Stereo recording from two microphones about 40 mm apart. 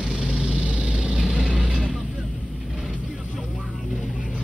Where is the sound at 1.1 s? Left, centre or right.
Centre.